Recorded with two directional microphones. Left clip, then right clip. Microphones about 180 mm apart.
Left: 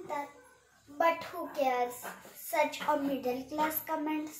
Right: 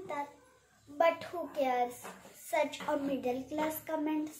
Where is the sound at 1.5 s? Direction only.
15° right (ahead or behind).